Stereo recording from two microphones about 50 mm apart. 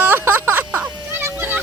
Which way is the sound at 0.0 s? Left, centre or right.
Right.